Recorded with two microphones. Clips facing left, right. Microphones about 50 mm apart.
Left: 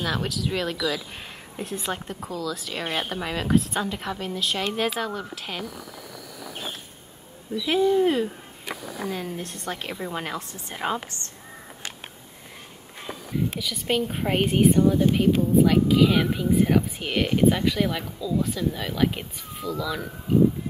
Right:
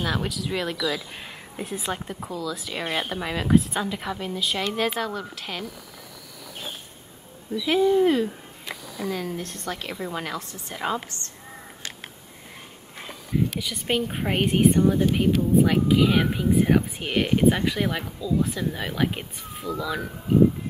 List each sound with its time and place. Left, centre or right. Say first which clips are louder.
0.0 s a woman's voice: even; centre
7.5 s a woman's voice: right 1 dB; centre
13.6 s speech: even; centre